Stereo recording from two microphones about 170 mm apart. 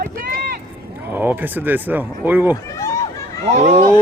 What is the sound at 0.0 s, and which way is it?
Vehicle, 60° right (ahead or behind).